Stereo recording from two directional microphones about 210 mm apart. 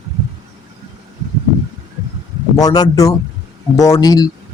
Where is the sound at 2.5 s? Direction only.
20° left (ahead or behind).